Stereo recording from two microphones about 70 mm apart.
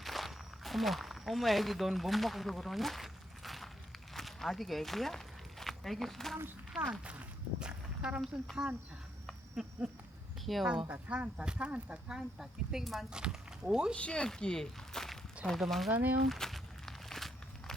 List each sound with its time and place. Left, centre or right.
0.0 s a sound: centre
6.7 s speech: centre
8.2 s speech: centre
10.4 s speech: centre
10.7 s speech: centre
13.9 s speech: centre
15.9 s speech: right
16.3 s walk: centre